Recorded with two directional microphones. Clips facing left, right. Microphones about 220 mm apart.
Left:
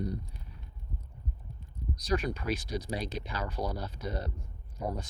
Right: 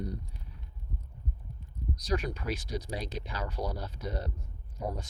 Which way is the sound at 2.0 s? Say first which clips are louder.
Left 2 dB; 40° right (ahead or behind).